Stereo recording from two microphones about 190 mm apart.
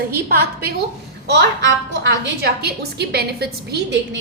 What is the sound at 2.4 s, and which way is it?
A woman's voice, 60° right (ahead or behind).